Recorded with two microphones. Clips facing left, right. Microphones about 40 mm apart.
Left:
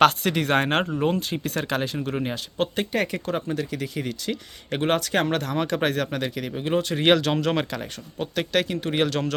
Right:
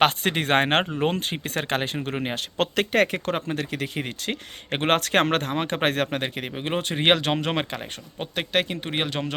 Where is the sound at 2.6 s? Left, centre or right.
Right.